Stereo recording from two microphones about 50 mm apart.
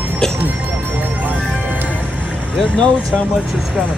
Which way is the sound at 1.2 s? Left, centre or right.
Right.